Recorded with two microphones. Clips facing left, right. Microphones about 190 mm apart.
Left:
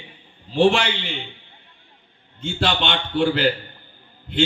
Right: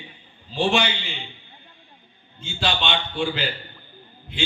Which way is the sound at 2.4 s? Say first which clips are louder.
Left 3 dB; 55° left (ahead or behind).